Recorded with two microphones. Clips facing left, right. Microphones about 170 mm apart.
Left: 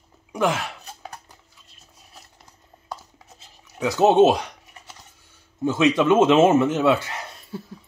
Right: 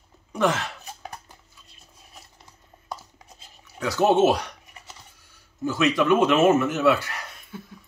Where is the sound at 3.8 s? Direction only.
20° left (ahead or behind).